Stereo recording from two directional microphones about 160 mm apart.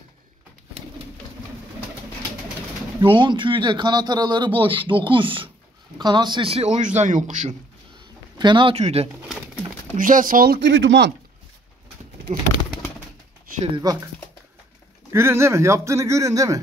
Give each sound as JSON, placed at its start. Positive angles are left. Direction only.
{"t": 3.0, "sound": "a man's voice", "side_deg": -30}
{"t": 8.4, "sound": "speech", "side_deg": -30}
{"t": 9.9, "sound": "speech", "side_deg": -55}
{"t": 12.3, "sound": "a man's voice", "side_deg": -45}
{"t": 13.7, "sound": "speech", "side_deg": -20}
{"t": 15.1, "sound": "speech", "side_deg": -15}